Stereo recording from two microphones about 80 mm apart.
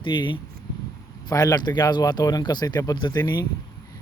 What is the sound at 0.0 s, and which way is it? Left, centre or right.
Speech, left.